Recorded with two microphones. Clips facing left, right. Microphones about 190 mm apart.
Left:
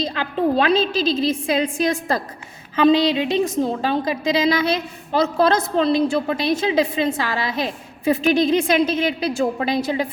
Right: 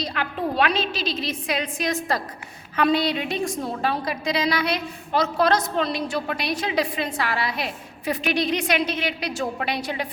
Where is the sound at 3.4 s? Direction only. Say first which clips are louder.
Left 5 dB; 20° left (ahead or behind).